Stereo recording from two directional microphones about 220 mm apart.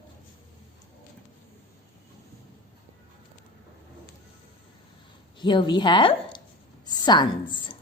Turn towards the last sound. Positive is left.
turn(degrees=20)  # may be behind; listen again after turning